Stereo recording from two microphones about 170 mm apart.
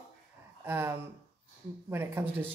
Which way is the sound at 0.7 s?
15° right (ahead or behind).